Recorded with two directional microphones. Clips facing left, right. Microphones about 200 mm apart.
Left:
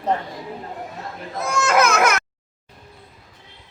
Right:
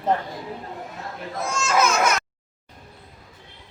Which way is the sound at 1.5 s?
65° left (ahead or behind).